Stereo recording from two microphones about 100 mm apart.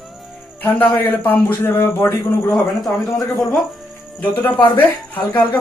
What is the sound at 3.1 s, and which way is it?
Speech, 35° left (ahead or behind).